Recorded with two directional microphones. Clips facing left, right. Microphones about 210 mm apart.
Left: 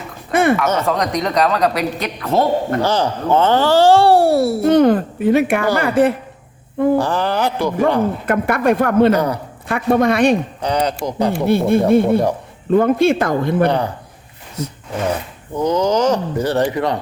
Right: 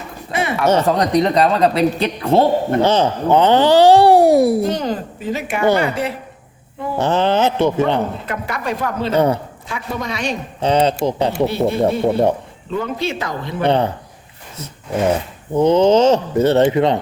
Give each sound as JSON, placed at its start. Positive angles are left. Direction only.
{"t": 0.3, "sound": "speech", "side_deg": 50}
{"t": 0.5, "sound": "speech", "side_deg": -30}
{"t": 4.6, "sound": "speech", "side_deg": 60}
{"t": 7.0, "sound": "speech", "side_deg": -20}
{"t": 8.3, "sound": "speech", "side_deg": 55}
{"t": 9.1, "sound": "speech", "side_deg": -25}
{"t": 9.6, "sound": "speech", "side_deg": 55}
{"t": 10.6, "sound": "speech", "side_deg": -25}
{"t": 11.4, "sound": "speech", "side_deg": 55}
{"t": 13.7, "sound": "speech", "side_deg": -25}
{"t": 15.5, "sound": "speech", "side_deg": -25}